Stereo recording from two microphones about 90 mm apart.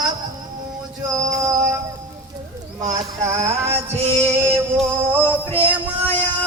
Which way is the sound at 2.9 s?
35° right (ahead or behind).